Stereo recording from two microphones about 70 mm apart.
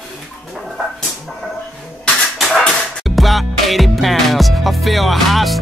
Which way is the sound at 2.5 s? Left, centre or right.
Centre.